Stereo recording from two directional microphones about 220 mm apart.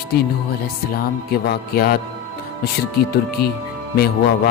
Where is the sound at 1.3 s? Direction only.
45° left (ahead or behind).